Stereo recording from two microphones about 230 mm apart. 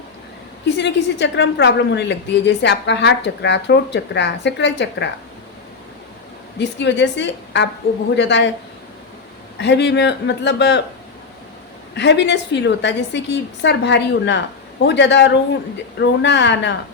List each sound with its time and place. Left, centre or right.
0.8 s a woman's voice: left
6.6 s a woman's voice: left
9.6 s a woman's voice: left
11.9 s a woman's voice: left